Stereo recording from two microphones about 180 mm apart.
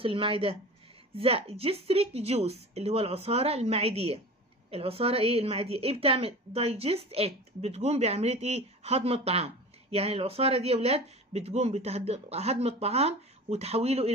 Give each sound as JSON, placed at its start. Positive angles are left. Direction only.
{"t": 0.0, "sound": "a woman's voice", "side_deg": -30}